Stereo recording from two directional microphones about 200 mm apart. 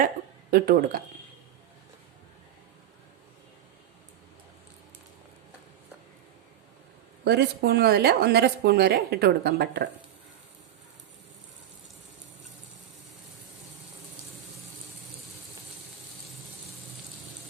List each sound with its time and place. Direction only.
0.5 s speech: 50° right (ahead or behind)
7.3 s speech: 55° right (ahead or behind)